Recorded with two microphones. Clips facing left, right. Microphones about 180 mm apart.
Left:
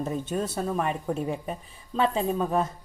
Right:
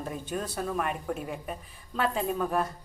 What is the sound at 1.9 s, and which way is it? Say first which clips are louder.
Speech: left 4 dB; 25° left (ahead or behind).